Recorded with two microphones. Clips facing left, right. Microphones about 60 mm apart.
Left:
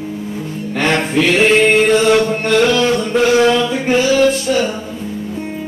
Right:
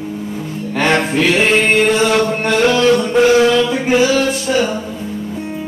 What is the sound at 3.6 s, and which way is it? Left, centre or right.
Music, centre.